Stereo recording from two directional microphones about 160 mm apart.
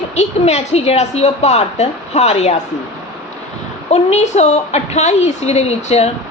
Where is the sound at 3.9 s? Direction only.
45° left (ahead or behind).